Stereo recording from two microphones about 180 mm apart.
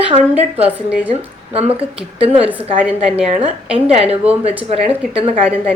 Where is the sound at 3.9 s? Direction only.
35° right (ahead or behind).